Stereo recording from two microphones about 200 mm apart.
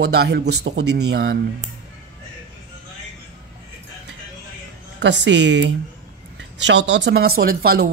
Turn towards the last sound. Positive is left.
turn(degrees=-50)  # may be behind; listen again after turning